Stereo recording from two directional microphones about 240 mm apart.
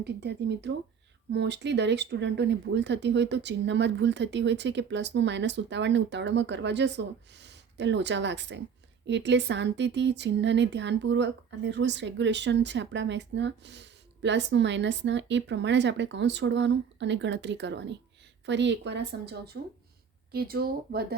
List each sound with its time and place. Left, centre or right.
0.0 s speech: right